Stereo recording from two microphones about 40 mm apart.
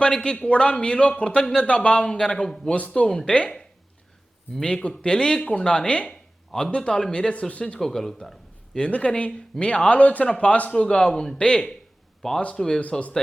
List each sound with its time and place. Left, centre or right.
0.2 s speech: left
3.3 s speech: left
4.6 s speech: left
6.1 s a sound: centre
6.7 s speech: left
7.8 s speech: centre
8.9 s speech: left
11.3 s speech: left
12.2 s speech: centre